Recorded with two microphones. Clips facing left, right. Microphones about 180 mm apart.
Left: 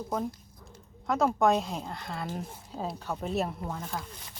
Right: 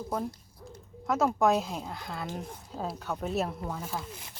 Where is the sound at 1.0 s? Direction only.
Centre (ahead or behind).